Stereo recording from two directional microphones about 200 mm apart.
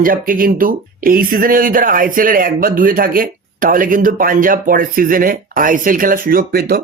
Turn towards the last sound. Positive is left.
turn(degrees=-50)  # may be behind; listen again after turning